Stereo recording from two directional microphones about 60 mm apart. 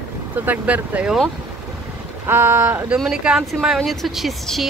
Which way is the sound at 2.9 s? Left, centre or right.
Centre.